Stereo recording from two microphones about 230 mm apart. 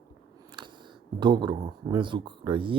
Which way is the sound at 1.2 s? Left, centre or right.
Centre.